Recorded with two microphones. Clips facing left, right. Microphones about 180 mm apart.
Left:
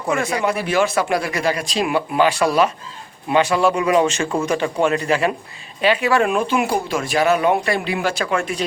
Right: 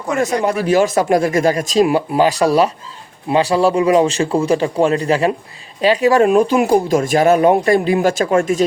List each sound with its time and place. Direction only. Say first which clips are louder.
0.1 s speech: right 3 dB; 40° right (ahead or behind)